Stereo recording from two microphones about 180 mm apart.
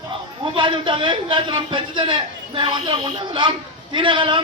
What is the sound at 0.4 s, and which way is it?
A man's voice, 25° right (ahead or behind).